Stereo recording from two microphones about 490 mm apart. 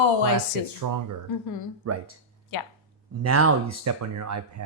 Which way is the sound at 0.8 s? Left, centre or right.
Right.